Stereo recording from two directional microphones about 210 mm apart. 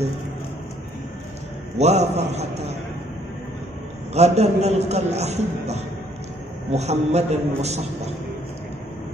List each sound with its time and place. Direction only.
1.8 s a man's voice: 30° right (ahead or behind)
4.1 s a man's voice: 30° right (ahead or behind)